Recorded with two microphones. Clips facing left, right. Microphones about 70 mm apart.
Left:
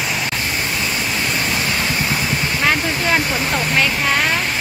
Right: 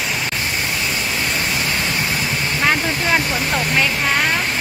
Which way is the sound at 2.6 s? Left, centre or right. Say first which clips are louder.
Right 1 dB; centre.